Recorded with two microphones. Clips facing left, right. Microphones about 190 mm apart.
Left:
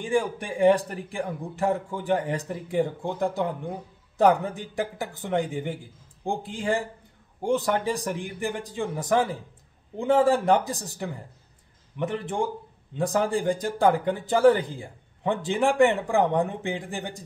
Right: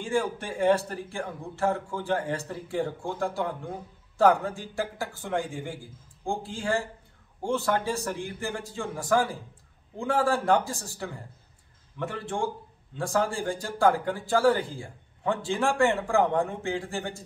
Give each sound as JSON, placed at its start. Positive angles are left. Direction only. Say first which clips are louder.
{"t": 0.0, "sound": "speech", "louder": "left 2 dB", "side_deg": 15}